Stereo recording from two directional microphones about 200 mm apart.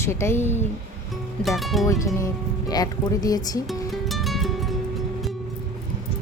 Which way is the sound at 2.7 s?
20° left (ahead or behind).